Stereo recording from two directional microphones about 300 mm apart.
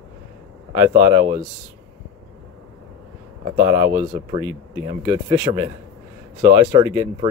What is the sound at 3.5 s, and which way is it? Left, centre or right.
Speech, centre.